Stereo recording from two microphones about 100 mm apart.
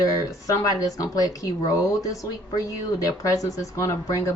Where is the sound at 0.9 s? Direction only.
35° left (ahead or behind).